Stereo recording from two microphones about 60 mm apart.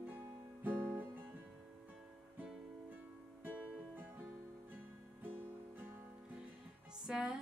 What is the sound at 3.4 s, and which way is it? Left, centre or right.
Music, right.